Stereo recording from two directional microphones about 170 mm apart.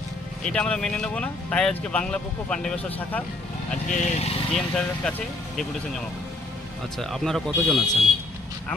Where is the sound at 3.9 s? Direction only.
45° left (ahead or behind).